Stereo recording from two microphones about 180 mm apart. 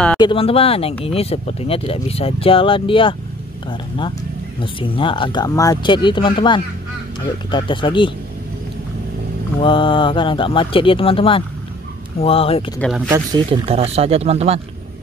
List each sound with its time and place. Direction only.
0.2 s speech: 30° left (ahead or behind)
4.6 s speech: 30° left (ahead or behind)
9.6 s speech: 30° left (ahead or behind)
13.1 s speech: 25° right (ahead or behind)